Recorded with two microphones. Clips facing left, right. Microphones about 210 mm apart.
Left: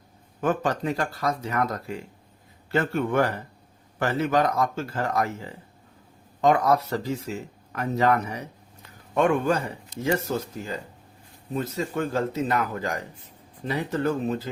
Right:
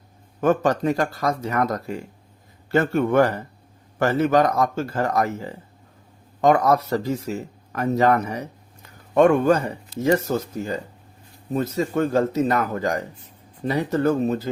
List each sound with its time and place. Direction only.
0.4 s speech: 45° right (ahead or behind)
6.9 s speech: 45° right (ahead or behind)
11.5 s speech: 45° right (ahead or behind)